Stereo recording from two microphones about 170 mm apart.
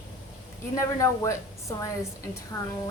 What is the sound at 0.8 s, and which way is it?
Speech, 20° left (ahead or behind).